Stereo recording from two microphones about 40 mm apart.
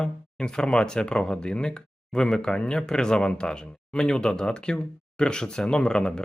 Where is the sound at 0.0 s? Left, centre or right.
Left.